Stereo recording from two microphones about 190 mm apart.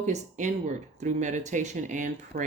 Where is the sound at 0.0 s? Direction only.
40° right (ahead or behind).